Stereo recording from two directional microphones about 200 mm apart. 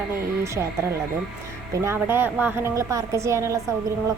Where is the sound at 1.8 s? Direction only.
10° right (ahead or behind).